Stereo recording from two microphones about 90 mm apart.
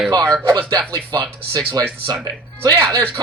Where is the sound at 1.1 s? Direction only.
45° right (ahead or behind).